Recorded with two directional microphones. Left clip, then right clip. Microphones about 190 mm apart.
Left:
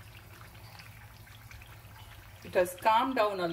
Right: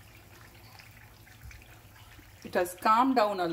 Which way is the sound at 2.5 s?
40° right (ahead or behind).